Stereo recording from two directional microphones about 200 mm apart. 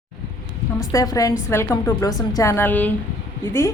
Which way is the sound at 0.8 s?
20° left (ahead or behind).